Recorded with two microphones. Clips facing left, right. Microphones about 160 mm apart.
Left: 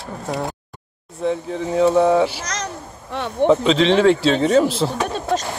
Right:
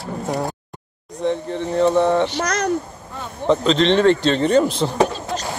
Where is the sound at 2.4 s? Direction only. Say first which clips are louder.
Right 7 dB; 55° right (ahead or behind).